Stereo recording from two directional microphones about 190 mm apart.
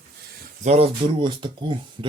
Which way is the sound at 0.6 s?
35° right (ahead or behind).